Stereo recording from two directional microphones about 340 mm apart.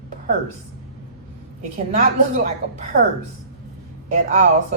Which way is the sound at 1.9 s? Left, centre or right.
Right.